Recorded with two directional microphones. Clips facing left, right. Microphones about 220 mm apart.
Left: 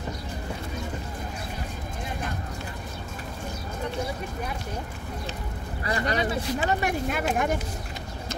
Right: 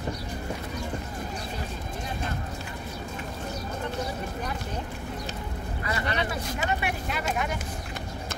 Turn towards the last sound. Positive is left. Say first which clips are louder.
# left 4 dB
turn(degrees=50)  # may be behind; listen again after turning